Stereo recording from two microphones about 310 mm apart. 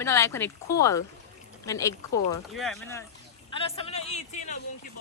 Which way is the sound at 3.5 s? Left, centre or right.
Centre.